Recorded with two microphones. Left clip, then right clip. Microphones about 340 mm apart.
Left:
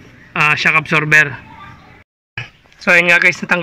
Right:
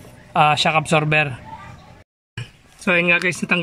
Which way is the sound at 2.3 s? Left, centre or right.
Centre.